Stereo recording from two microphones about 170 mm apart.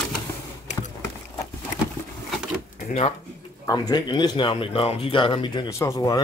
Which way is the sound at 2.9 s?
40° left (ahead or behind).